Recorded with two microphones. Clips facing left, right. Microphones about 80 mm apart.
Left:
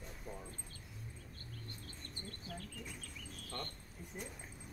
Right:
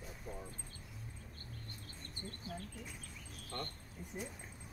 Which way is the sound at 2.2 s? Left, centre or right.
Right.